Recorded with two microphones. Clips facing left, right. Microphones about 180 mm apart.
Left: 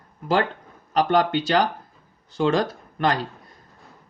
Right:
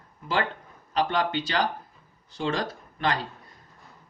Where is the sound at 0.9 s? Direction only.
45° left (ahead or behind).